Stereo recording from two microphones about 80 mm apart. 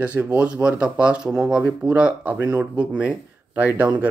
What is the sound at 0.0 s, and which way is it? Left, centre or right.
Speech, centre.